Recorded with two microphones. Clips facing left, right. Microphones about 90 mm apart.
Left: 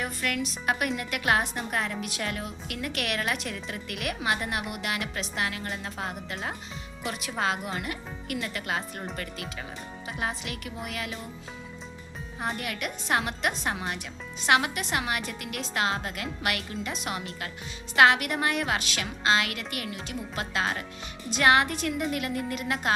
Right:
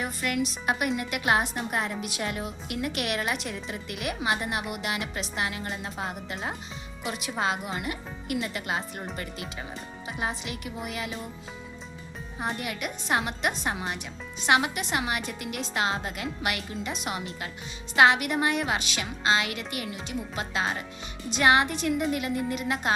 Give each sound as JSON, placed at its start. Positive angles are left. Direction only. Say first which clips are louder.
{"t": 0.0, "sound": "a woman's voice", "louder": "right 2 dB", "side_deg": -10}
{"t": 12.4, "sound": "a woman's voice", "louder": "even", "side_deg": -5}